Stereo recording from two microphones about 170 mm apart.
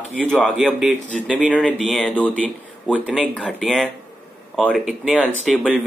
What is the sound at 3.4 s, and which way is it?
Speech, 5° left (ahead or behind).